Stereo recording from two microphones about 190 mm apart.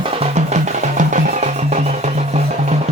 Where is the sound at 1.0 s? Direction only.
40° right (ahead or behind).